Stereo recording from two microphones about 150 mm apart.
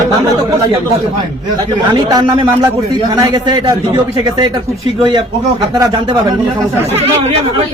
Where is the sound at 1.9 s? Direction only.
25° right (ahead or behind).